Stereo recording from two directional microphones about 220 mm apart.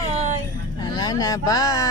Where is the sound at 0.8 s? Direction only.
20° left (ahead or behind).